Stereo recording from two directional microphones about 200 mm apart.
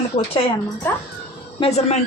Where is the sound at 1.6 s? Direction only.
30° left (ahead or behind).